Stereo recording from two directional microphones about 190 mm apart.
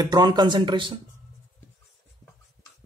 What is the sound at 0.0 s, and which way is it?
Speech, 20° right (ahead or behind).